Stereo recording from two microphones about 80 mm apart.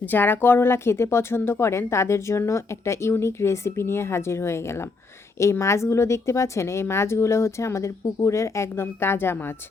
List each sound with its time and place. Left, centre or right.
0.1 s a woman's voice: left